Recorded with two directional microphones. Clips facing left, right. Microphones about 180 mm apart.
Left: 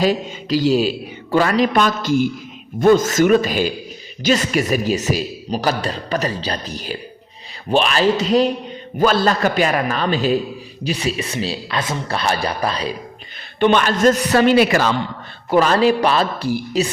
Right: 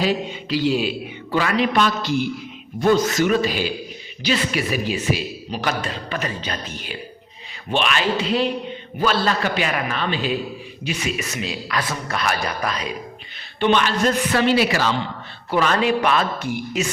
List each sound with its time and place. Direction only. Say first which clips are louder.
0.0 s a man's voice: left 3 dB; 45° left (ahead or behind)
13.6 s a man's voice: left 4 dB; 50° left (ahead or behind)
15.4 s a man's voice: left 5 dB; 40° left (ahead or behind)